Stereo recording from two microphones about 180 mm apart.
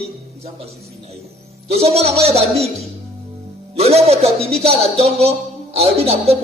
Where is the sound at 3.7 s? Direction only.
35° right (ahead or behind).